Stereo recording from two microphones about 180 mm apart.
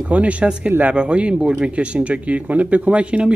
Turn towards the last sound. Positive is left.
turn(degrees=-5)  # may be behind; listen again after turning